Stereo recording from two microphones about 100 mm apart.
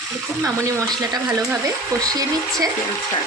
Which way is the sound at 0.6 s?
40° right (ahead or behind).